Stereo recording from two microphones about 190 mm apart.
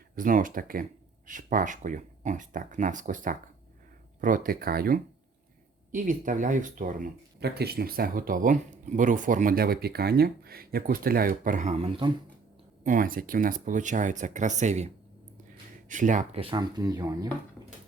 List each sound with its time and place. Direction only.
0.2 s speech: 45° right (ahead or behind); by 12.1 s 25° right (ahead or behind)
12.8 s speech: 45° right (ahead or behind)
15.9 s speech: 40° right (ahead or behind); by 17.3 s 20° right (ahead or behind)